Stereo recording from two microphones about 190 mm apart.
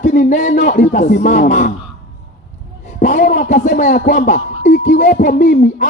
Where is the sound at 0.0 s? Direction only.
40° left (ahead or behind).